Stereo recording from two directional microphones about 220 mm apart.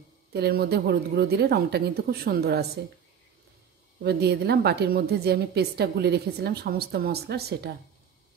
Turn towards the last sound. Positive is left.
turn(degrees=-45)  # may be behind; listen again after turning